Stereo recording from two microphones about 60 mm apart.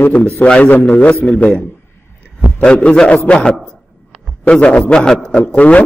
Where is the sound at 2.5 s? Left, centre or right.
Centre.